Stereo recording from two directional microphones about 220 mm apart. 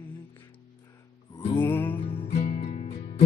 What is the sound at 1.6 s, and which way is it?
Music, 10° left (ahead or behind).